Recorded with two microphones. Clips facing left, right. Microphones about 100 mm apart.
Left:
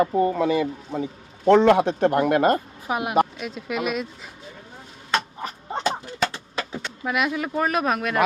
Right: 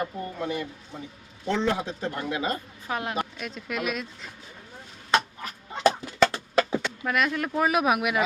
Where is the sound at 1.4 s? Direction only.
70° left (ahead or behind).